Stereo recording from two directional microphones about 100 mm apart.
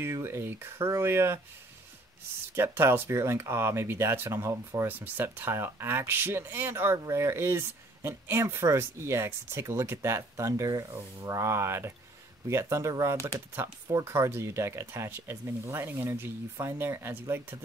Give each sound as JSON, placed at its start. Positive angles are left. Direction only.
{"t": 0.0, "sound": "speech", "side_deg": -25}
{"t": 2.5, "sound": "speech", "side_deg": -25}